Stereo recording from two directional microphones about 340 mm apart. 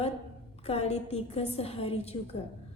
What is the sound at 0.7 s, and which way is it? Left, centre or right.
A woman's voice, centre.